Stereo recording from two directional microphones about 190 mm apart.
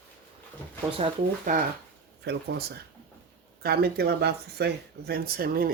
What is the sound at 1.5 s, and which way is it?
Speech, 45° right (ahead or behind).